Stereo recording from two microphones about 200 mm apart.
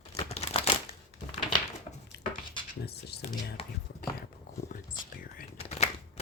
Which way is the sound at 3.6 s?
30° left (ahead or behind).